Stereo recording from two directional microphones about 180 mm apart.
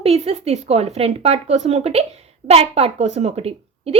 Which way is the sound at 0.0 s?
35° right (ahead or behind).